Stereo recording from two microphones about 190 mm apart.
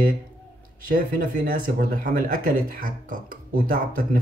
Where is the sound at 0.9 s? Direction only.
50° right (ahead or behind).